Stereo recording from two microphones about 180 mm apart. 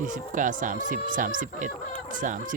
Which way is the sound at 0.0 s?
45° right (ahead or behind).